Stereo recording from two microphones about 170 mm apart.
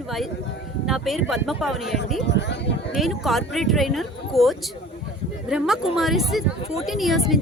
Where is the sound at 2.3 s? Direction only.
90° left.